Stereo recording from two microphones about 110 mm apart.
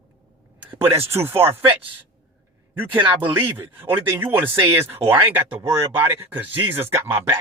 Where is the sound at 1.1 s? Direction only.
20° right (ahead or behind).